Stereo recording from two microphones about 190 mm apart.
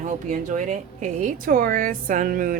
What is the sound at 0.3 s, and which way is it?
A woman's voice, 40° right (ahead or behind).